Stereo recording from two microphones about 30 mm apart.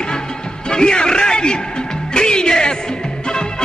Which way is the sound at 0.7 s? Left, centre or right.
Left.